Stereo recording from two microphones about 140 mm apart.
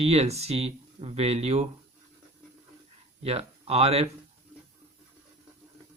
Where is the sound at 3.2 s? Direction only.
45° right (ahead or behind).